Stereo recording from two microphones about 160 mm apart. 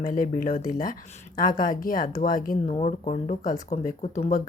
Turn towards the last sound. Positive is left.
turn(degrees=45)  # may be behind; listen again after turning